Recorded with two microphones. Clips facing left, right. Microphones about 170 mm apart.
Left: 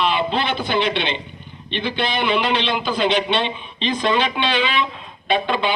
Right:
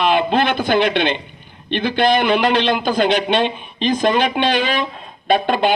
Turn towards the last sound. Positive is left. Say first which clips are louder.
# right 4 dB
turn(degrees=-45)  # may be behind; listen again after turning